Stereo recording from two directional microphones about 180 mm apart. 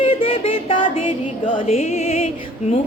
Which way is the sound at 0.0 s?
30° left (ahead or behind).